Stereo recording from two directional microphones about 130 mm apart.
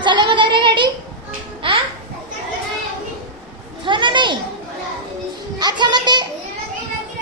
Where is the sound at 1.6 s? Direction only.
40° right (ahead or behind).